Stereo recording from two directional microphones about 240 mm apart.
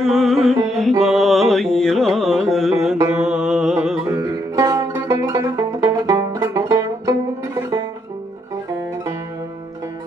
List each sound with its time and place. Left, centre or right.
0.0 s music: centre